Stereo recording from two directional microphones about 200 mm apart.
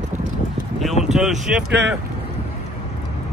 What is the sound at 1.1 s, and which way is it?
Speech, centre (ahead or behind).